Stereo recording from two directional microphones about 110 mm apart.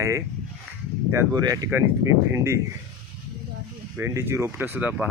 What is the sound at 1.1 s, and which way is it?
Speech, 35° right (ahead or behind).